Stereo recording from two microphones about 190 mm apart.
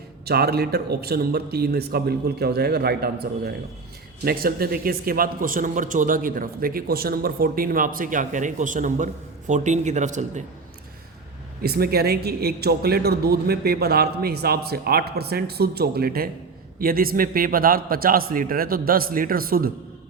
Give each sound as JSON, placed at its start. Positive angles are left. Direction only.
{"t": 0.3, "sound": "a man's voice", "side_deg": -55}
{"t": 11.6, "sound": "a man's voice", "side_deg": -55}